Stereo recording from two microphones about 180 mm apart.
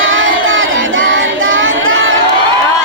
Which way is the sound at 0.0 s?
90° right.